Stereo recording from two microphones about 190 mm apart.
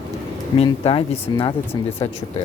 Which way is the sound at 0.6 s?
30° left (ahead or behind).